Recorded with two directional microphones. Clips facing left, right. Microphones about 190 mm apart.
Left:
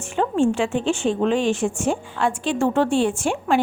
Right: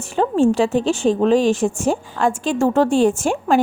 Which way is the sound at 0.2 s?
40° right (ahead or behind).